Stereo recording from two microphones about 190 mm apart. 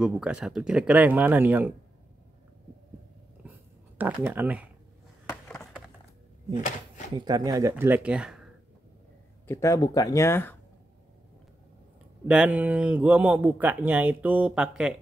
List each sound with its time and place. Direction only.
0.0 s speech: 5° right (ahead or behind)
3.4 s a sound: 10° right (ahead or behind)
4.0 s speech: 10° right (ahead or behind)
5.3 s a sound: 10° left (ahead or behind)
6.5 s speech: 40° left (ahead or behind)
7.2 s speech: 20° right (ahead or behind)
7.7 s speech: 10° right (ahead or behind)
9.5 s speech: 15° left (ahead or behind)
12.3 s speech: 5° right (ahead or behind)